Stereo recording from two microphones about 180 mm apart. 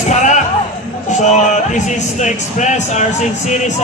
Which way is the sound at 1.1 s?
40° left (ahead or behind).